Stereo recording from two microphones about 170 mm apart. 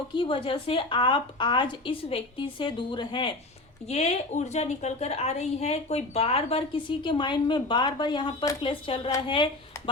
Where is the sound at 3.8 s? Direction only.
40° left (ahead or behind).